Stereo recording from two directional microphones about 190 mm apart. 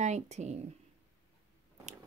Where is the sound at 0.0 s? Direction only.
35° right (ahead or behind).